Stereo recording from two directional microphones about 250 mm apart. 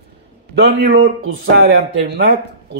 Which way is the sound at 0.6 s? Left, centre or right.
Right.